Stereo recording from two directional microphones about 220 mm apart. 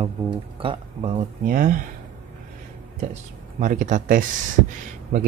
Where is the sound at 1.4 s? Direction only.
40° right (ahead or behind).